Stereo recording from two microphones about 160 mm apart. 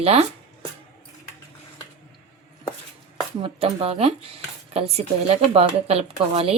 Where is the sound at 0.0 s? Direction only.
40° right (ahead or behind).